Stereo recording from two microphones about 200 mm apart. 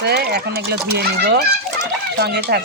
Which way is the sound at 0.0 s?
55° right (ahead or behind).